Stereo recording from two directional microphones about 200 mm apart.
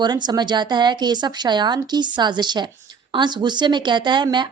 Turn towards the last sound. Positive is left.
turn(degrees=-20)  # may be behind; listen again after turning